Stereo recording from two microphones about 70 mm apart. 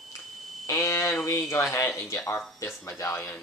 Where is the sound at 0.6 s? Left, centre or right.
Left.